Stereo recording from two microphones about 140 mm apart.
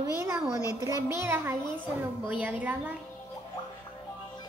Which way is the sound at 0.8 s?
20° right (ahead or behind).